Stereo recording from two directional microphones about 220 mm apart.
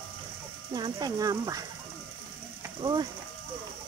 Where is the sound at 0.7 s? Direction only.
15° right (ahead or behind).